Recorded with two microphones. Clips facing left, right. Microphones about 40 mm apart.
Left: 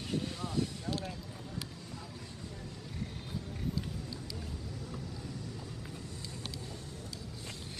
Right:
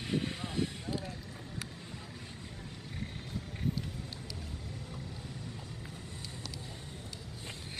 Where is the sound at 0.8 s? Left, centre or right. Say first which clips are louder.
Left 1 dB; left.